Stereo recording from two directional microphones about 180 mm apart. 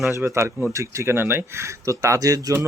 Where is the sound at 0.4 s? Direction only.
15° right (ahead or behind).